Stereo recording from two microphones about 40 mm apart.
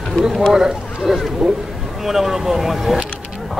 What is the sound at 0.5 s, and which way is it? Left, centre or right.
Speech, centre.